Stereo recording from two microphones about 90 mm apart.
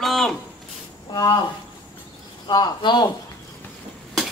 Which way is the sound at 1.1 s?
45° left (ahead or behind).